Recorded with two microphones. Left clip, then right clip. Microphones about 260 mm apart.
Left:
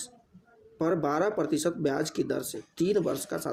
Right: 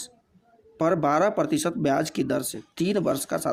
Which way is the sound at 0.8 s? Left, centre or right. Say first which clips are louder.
Right 6 dB; right.